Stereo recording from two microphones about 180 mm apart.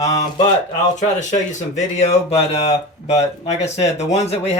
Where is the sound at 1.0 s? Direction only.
40° left (ahead or behind).